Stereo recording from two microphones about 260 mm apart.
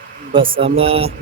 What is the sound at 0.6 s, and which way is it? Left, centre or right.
Speech, right.